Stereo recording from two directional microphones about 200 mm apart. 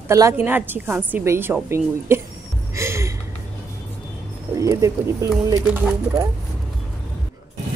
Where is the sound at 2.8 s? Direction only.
15° right (ahead or behind).